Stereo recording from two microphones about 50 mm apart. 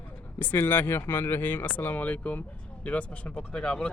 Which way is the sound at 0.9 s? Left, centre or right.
Left.